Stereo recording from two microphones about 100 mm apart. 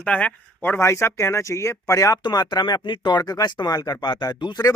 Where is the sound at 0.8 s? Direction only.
30° left (ahead or behind).